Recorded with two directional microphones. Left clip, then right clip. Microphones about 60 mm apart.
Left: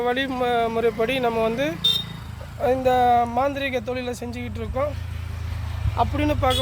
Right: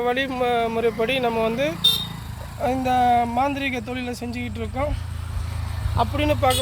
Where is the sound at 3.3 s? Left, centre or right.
Left.